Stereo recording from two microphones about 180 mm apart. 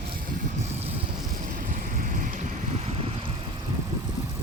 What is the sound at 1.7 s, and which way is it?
Vehicle, 45° right (ahead or behind).